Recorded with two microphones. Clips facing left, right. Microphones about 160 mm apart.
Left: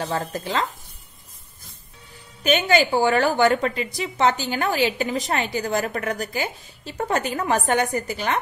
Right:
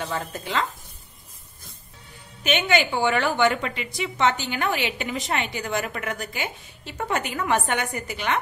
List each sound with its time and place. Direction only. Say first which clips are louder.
0.0 s a woman's voice: left 4 dB; 35° left (ahead or behind)
2.4 s a woman's voice: left 3 dB; 40° left (ahead or behind)